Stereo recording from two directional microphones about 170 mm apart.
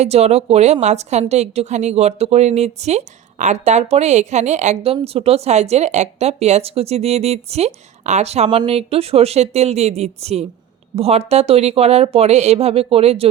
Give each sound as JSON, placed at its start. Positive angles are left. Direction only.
{"t": 0.0, "sound": "a woman's voice", "side_deg": -40}